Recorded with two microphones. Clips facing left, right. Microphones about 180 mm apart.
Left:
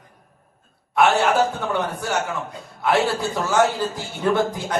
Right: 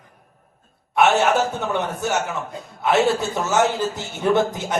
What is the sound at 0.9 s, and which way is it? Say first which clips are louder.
Speech: right 1 dB; 20° right (ahead or behind).